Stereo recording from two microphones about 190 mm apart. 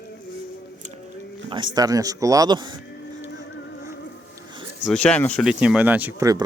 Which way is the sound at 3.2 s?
75° left (ahead or behind).